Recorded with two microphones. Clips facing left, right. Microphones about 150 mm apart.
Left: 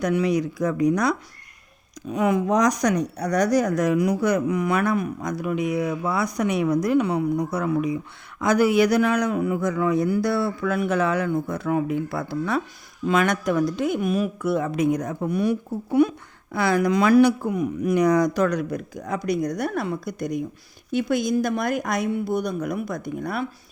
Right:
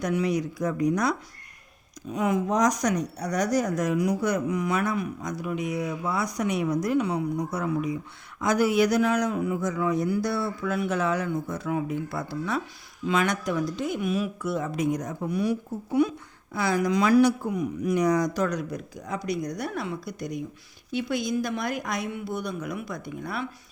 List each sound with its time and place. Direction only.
0.0 s a woman's voice: 75° left (ahead or behind); by 23.5 s 45° left (ahead or behind)